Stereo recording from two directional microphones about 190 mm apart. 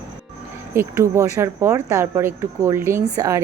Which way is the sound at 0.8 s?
15° right (ahead or behind).